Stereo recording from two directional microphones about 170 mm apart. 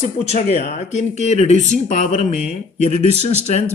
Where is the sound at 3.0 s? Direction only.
40° right (ahead or behind).